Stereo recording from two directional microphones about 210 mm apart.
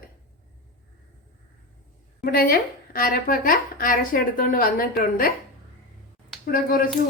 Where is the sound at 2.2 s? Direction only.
45° left (ahead or behind).